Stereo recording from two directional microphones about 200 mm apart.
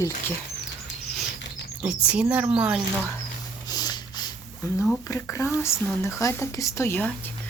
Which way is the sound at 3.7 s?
20° left (ahead or behind).